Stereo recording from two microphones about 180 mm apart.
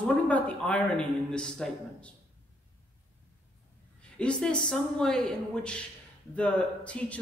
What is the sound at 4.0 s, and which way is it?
A woman's voice, 5° left (ahead or behind).